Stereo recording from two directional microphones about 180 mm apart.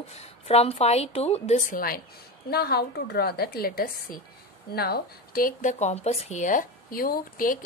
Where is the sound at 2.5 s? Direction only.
60° left (ahead or behind).